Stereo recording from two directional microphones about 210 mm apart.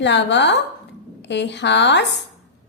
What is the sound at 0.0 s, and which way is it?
A woman's voice, 55° left (ahead or behind).